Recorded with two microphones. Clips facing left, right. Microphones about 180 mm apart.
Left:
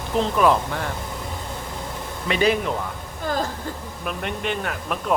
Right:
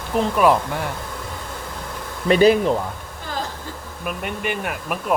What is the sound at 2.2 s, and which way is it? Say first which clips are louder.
Speech: right 7 dB; 40° right (ahead or behind).